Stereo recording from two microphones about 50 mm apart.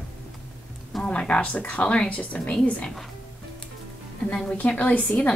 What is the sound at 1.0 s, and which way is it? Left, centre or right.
A woman's voice, left.